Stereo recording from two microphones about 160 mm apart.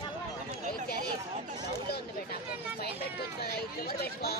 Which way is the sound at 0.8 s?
75° left (ahead or behind).